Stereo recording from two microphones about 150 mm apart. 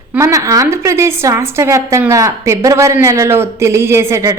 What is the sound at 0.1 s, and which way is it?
A woman's voice, 20° right (ahead or behind).